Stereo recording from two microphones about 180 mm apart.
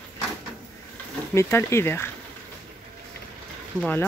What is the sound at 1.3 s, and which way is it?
Speech, 15° left (ahead or behind).